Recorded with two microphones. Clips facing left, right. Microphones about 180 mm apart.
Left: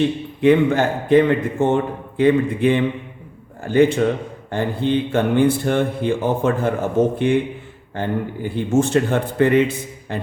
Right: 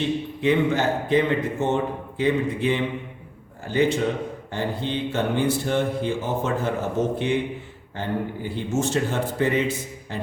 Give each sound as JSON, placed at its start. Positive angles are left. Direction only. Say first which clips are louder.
{"t": 0.4, "sound": "a man's voice", "louder": "left 6 dB", "side_deg": 55}